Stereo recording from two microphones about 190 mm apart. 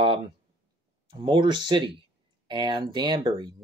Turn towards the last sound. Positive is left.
turn(degrees=-20)  # may be behind; listen again after turning